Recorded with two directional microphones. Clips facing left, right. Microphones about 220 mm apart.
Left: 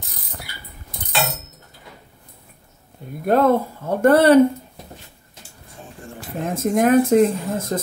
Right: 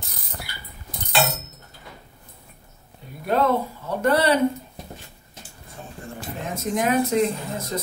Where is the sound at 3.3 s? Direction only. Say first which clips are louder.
Left 5 dB; 50° left (ahead or behind).